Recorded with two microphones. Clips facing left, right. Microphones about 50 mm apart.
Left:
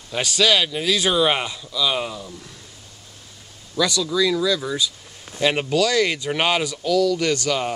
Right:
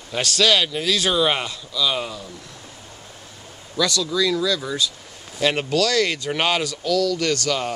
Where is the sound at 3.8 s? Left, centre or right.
Centre.